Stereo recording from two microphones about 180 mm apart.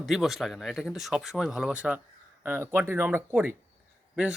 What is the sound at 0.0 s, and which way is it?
Speech, centre (ahead or behind).